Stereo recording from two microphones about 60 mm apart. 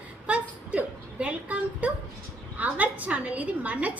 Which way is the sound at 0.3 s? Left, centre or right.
Right.